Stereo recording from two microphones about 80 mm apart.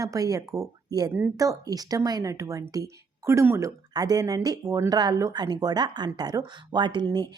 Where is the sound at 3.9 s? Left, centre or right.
Right.